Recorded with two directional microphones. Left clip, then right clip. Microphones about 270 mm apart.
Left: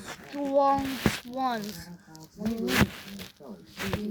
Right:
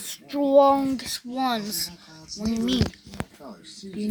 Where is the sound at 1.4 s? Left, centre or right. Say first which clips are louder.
Right 6 dB; right.